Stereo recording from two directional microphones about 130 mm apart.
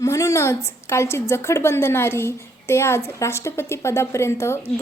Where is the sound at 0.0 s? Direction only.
25° left (ahead or behind).